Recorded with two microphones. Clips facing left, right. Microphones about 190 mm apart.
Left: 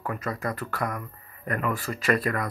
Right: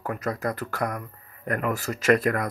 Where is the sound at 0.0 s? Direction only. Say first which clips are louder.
Right 2 dB; 45° right (ahead or behind).